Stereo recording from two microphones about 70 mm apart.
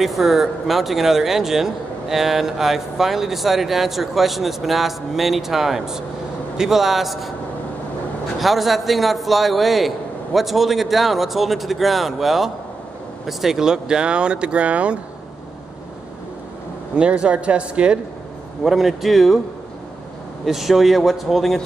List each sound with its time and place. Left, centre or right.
0.0 s speech: centre
8.4 s speech: centre
16.9 s speech: centre
18.6 s speech: centre
20.4 s speech: centre